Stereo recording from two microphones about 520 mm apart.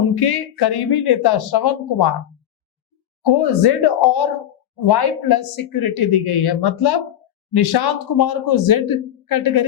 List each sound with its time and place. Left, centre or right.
0.1 s speech: left
3.2 s speech: left